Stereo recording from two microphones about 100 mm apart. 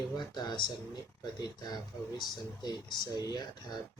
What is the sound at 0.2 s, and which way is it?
Speech, 45° left (ahead or behind).